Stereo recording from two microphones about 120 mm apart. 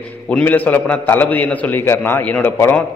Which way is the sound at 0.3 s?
15° left (ahead or behind).